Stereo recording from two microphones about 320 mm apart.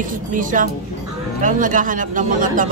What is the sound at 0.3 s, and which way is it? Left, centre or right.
A man's voice, right.